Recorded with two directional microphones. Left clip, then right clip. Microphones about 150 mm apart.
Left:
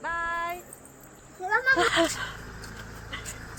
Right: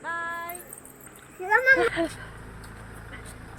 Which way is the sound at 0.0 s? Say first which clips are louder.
Left 2 dB; 25° left (ahead or behind).